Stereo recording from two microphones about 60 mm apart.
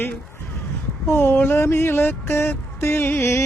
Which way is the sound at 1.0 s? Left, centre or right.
Left.